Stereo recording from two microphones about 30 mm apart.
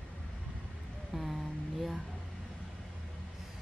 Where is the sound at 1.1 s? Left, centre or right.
Centre.